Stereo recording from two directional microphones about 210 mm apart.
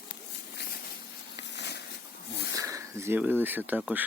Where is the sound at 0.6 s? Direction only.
55° left (ahead or behind).